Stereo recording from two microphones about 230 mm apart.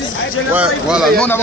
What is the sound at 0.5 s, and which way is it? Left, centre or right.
Speech, centre.